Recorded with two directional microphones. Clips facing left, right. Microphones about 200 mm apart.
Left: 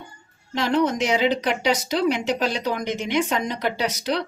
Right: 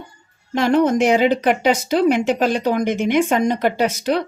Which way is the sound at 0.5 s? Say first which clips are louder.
Right 6 dB; 55° right (ahead or behind).